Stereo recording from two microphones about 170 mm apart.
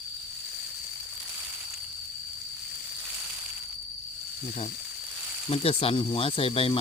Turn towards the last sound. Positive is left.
turn(degrees=35)  # may be behind; listen again after turning